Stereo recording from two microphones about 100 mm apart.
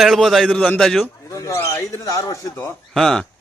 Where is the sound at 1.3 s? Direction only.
35° left (ahead or behind).